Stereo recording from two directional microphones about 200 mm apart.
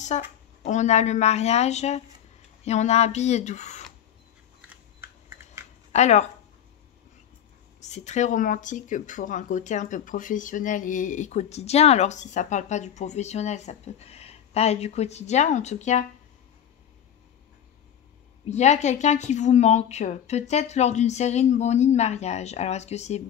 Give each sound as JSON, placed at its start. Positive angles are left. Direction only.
{"t": 0.0, "sound": "speech", "side_deg": 35}
{"t": 4.6, "sound": "typing", "side_deg": -10}
{"t": 5.9, "sound": "speech", "side_deg": 35}
{"t": 7.8, "sound": "speech", "side_deg": 35}
{"t": 18.5, "sound": "speech", "side_deg": 35}